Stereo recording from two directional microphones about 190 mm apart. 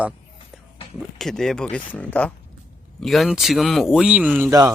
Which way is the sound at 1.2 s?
5° left (ahead or behind).